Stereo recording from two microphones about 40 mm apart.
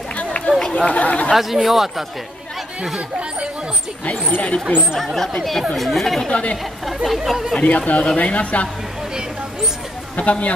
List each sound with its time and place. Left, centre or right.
0.1 s run: left
0.6 s chatter: centre
0.8 s speech: left
1.3 s speech: centre
3.0 s speech: right
4.4 s speech: left
4.9 s speech: centre
7.6 s speech: left
10.1 s speech: left